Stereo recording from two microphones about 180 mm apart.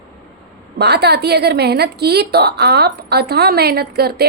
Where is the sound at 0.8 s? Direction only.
65° right (ahead or behind).